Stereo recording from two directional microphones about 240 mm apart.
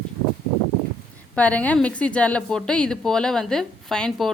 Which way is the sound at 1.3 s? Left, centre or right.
Centre.